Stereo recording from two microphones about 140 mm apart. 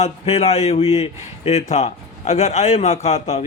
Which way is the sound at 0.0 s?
50° left (ahead or behind).